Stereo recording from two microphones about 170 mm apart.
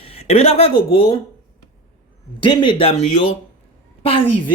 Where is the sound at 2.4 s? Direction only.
30° left (ahead or behind).